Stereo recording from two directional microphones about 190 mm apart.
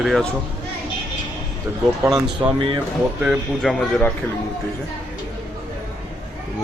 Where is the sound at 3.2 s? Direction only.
Centre (ahead or behind).